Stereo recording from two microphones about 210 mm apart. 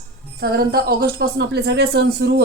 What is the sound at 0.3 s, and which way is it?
Music, 45° right (ahead or behind).